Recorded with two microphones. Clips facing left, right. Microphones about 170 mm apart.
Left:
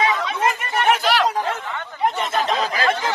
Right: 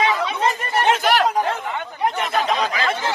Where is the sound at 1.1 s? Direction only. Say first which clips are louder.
Right 1 dB; 50° right (ahead or behind).